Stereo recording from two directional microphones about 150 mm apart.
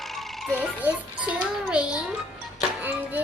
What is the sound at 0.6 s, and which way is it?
Music, 10° right (ahead or behind).